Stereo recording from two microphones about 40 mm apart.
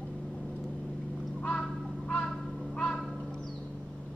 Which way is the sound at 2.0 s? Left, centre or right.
Left.